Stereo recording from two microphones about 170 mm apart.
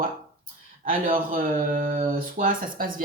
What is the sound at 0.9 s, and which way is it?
Speech, 55° right (ahead or behind).